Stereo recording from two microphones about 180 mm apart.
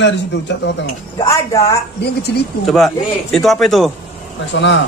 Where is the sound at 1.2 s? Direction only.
20° left (ahead or behind).